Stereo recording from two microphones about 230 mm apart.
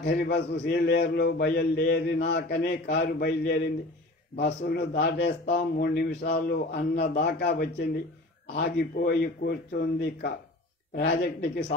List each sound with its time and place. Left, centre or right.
0.0 s a man's voice: left